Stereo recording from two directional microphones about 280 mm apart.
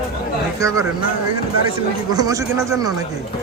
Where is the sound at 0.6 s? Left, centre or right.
Centre.